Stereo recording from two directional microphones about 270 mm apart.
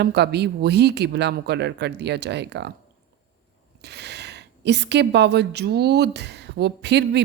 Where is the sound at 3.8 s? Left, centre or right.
Right.